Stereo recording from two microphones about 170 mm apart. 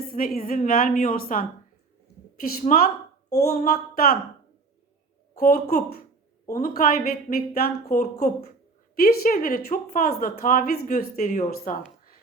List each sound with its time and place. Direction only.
0.3 s a woman's voice: 55° left (ahead or behind)
5.3 s a woman's voice: 55° left (ahead or behind)
11.5 s a sound: 55° left (ahead or behind)